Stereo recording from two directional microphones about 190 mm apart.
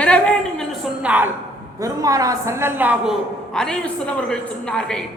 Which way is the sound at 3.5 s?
5° left (ahead or behind).